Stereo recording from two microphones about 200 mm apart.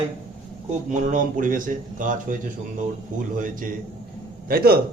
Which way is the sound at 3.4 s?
45° right (ahead or behind).